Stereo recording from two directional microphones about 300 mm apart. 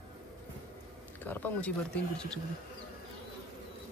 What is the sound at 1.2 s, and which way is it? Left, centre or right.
Speech, centre.